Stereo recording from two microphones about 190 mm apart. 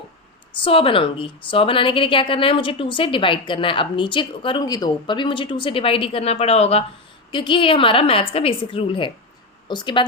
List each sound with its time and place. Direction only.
0.6 s a woman's voice: 30° left (ahead or behind)